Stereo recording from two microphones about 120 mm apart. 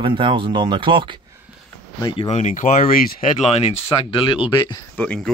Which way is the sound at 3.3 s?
60° left (ahead or behind).